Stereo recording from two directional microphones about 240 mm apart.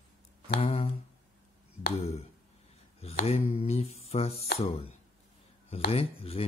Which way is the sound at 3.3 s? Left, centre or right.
Left.